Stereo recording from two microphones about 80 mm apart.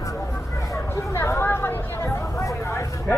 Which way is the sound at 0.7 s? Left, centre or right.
Left.